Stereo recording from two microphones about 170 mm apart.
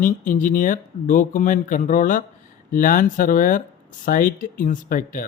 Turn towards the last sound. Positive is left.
turn(degrees=50)  # may be behind; listen again after turning